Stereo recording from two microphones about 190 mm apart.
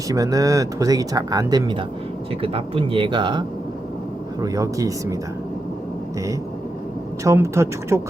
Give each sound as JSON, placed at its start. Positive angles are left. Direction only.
{"t": 0.1, "sound": "speech", "side_deg": -20}
{"t": 7.3, "sound": "speech", "side_deg": -15}